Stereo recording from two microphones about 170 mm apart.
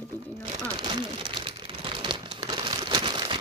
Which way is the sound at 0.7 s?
30° right (ahead or behind).